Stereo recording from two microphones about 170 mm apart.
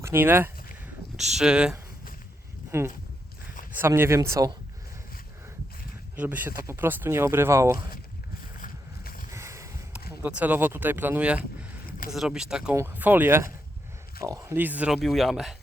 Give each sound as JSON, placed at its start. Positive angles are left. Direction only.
{"t": 0.0, "sound": "speech", "side_deg": -15}
{"t": 1.1, "sound": "speech", "side_deg": 0}
{"t": 2.7, "sound": "speech", "side_deg": -15}
{"t": 6.1, "sound": "speech", "side_deg": -10}
{"t": 8.6, "sound": "boat", "side_deg": 55}
{"t": 9.3, "sound": "a sound", "side_deg": -15}
{"t": 10.2, "sound": "speech", "side_deg": -10}
{"t": 11.9, "sound": "a sound", "side_deg": 60}
{"t": 12.1, "sound": "speech", "side_deg": 0}